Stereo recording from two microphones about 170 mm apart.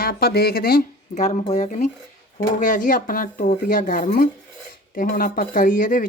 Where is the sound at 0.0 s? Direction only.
65° left (ahead or behind).